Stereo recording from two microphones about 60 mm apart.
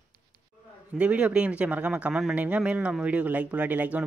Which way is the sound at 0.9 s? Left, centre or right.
Right.